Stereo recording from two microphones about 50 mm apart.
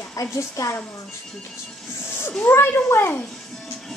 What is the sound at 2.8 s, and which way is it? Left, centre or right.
Speech, left.